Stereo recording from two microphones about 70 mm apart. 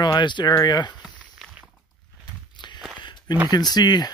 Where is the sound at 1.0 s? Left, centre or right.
Centre.